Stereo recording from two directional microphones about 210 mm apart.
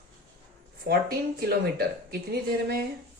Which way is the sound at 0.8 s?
45° right (ahead or behind).